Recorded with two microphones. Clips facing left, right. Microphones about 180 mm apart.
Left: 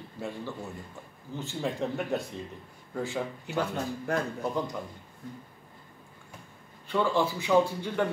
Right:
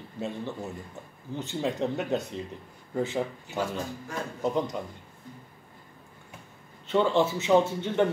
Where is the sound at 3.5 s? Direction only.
60° left (ahead or behind).